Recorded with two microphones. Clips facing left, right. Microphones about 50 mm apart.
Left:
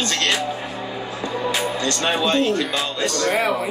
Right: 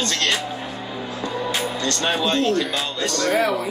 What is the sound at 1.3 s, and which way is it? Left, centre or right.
Music, centre.